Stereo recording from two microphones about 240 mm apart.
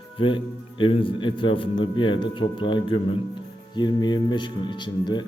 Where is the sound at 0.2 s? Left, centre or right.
Left.